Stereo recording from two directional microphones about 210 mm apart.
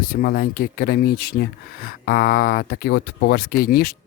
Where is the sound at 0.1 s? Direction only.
45° left (ahead or behind).